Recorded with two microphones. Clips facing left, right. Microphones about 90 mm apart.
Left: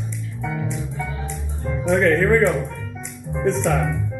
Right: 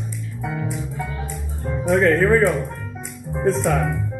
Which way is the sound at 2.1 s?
5° right (ahead or behind).